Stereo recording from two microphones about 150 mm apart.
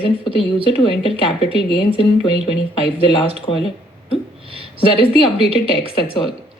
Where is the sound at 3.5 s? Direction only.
40° left (ahead or behind).